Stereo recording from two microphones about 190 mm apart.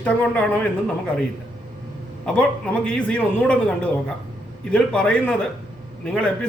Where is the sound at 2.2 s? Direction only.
5° left (ahead or behind).